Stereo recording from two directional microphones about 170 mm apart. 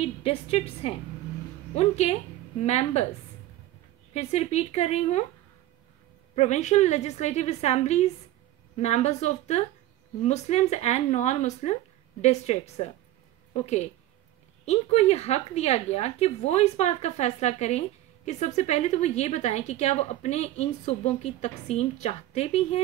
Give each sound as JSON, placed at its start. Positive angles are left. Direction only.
{"t": 0.0, "sound": "a woman's voice", "side_deg": 35}
{"t": 4.1, "sound": "a woman's voice", "side_deg": 40}
{"t": 6.3, "sound": "a woman's voice", "side_deg": 40}